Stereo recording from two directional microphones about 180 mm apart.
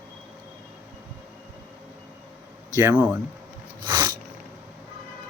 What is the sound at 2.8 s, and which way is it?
Speech, 10° right (ahead or behind).